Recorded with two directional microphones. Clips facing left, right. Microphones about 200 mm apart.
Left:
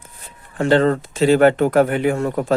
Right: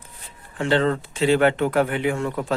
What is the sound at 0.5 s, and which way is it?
Speech, 45° left (ahead or behind).